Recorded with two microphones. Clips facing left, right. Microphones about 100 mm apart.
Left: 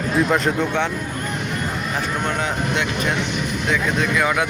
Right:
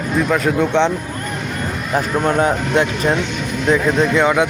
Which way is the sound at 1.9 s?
40° right (ahead or behind).